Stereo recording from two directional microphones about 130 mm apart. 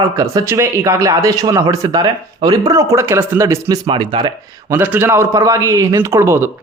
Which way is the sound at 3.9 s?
40° right (ahead or behind).